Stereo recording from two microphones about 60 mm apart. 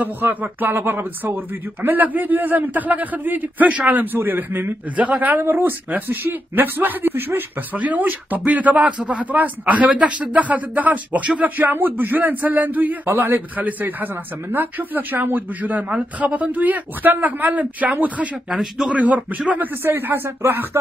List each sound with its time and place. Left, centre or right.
0.0 s a man's voice: right
0.7 s a man's voice: right
4.9 s speech: right
5.4 s a man's voice: right
7.7 s a man's voice: right
18.5 s speech: centre
18.9 s speech: right
19.8 s a man's voice: right